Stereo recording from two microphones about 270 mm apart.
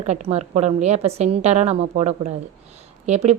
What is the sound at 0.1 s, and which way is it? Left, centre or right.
A woman's voice, right.